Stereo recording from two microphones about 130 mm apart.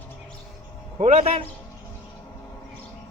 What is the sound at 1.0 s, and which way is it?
Speech, 55° right (ahead or behind).